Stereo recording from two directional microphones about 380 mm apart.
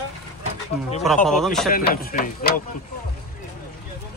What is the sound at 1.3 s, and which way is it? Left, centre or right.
Speech, centre.